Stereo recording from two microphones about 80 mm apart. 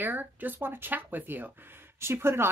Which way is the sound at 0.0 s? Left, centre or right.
Right.